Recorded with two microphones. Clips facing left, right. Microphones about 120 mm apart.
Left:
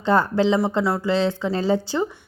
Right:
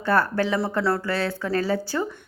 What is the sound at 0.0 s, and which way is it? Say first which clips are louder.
Speech: left 3 dB; 20° left (ahead or behind).